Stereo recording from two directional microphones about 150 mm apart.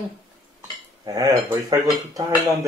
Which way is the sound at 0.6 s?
20° right (ahead or behind).